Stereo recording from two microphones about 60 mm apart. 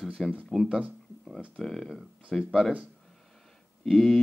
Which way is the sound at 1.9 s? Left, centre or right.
Centre.